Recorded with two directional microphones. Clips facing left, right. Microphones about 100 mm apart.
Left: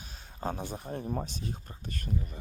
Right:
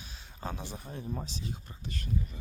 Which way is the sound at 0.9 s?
15° left (ahead or behind).